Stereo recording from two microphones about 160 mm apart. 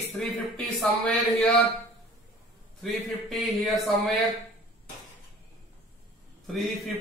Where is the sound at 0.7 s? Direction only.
5° left (ahead or behind).